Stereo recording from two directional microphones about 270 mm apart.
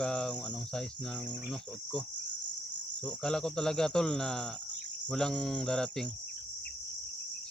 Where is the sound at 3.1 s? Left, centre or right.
Centre.